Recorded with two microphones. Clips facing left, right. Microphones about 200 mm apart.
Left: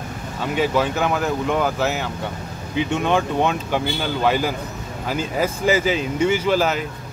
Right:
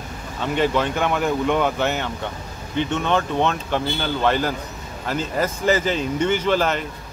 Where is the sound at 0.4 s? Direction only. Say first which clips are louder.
Even; 5° left (ahead or behind).